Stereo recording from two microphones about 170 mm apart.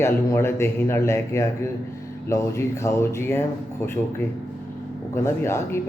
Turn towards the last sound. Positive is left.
turn(degrees=15)  # may be behind; listen again after turning